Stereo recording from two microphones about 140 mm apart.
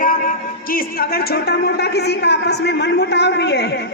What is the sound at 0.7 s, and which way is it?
Speech, 90° left.